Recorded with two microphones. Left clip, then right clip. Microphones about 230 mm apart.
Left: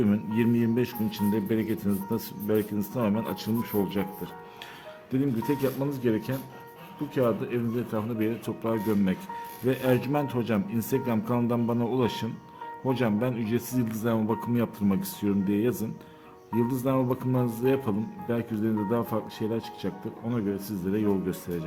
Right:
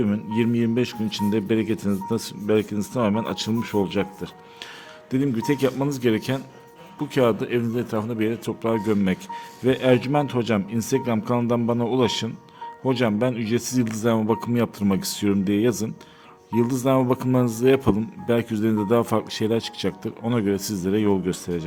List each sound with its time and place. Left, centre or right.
0.0 s speech: centre
5.1 s speech: right